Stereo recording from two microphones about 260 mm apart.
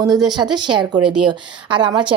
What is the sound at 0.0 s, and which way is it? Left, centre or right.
Speech, centre.